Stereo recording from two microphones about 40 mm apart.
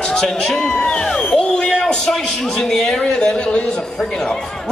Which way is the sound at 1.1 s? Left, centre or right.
Centre.